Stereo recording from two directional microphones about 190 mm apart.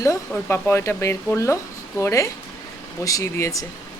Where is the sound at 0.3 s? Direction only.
10° left (ahead or behind).